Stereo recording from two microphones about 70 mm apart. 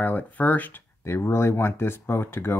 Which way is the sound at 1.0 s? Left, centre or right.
Left.